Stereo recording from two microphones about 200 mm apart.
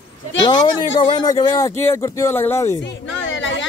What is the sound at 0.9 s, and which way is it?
Speech, 25° left (ahead or behind).